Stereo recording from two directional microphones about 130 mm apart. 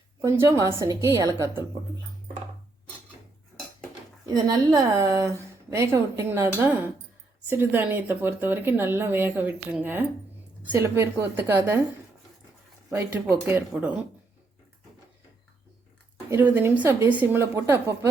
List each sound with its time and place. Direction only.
0.2 s a woman's voice: 20° right (ahead or behind)
4.3 s a woman's voice: 30° right (ahead or behind)
13.3 s speech: 15° right (ahead or behind)
16.3 s speech: 15° right (ahead or behind)